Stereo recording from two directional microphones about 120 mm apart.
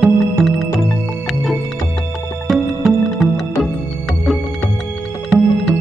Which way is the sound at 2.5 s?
Centre (ahead or behind).